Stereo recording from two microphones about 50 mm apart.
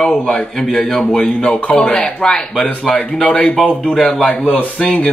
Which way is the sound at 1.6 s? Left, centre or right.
Left.